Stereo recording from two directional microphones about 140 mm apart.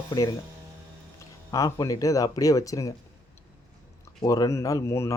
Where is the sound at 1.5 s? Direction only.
25° left (ahead or behind).